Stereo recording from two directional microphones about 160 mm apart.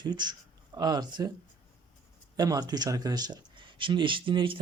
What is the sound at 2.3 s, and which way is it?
Speech, 25° right (ahead or behind).